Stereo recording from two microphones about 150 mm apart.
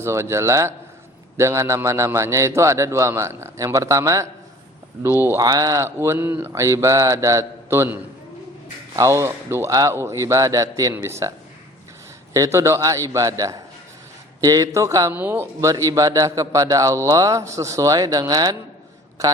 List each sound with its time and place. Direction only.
0.0 s a man's voice: 20° right (ahead or behind)
9.0 s a man's voice: 20° right (ahead or behind)